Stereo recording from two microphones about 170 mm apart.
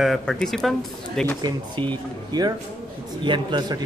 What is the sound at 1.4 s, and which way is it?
Speech, 25° right (ahead or behind).